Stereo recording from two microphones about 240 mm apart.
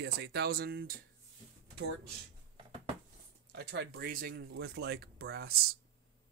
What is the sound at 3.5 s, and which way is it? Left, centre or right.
Speech, right.